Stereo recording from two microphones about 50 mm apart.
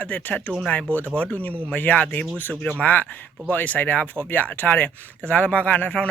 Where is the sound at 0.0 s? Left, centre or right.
Left.